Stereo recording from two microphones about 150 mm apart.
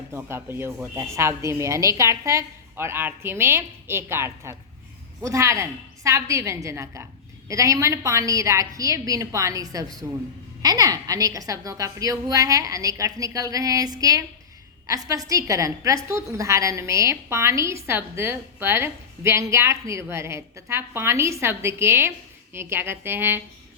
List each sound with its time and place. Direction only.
0.1 s a woman's voice: 15° right (ahead or behind)